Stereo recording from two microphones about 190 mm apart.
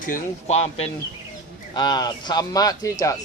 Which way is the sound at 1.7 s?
20° left (ahead or behind).